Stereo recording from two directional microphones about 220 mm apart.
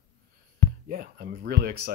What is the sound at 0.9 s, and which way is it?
Speech, 40° right (ahead or behind).